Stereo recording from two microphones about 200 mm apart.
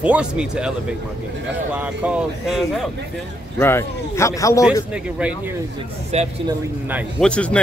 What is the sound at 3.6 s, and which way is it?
Speech, 10° left (ahead or behind).